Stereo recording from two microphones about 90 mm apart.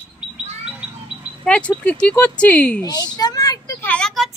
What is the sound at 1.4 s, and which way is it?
Speech, 10° left (ahead or behind).